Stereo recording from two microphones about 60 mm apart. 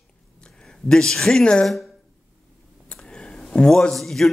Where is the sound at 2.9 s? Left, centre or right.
Centre.